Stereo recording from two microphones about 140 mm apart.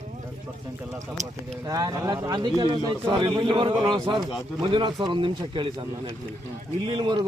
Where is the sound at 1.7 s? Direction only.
25° right (ahead or behind).